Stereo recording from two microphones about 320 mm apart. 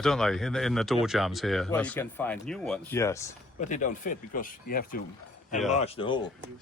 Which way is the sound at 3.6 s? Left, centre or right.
Left.